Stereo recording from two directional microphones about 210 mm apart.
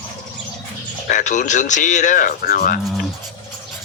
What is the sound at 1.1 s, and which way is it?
Speech, 35° left (ahead or behind).